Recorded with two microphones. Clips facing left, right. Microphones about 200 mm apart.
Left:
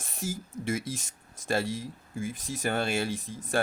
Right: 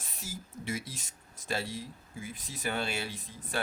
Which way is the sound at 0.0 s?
45° left (ahead or behind).